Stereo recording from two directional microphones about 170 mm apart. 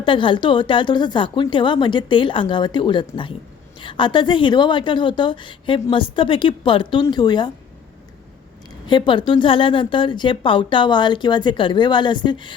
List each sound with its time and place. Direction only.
0.0 s a woman's voice: 30° left (ahead or behind)
8.9 s a woman's voice: 30° left (ahead or behind)